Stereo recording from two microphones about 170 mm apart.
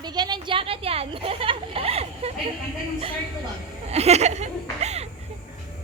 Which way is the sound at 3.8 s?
40° right (ahead or behind).